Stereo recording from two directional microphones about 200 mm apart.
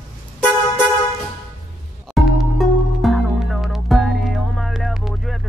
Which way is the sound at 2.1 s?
Centre (ahead or behind).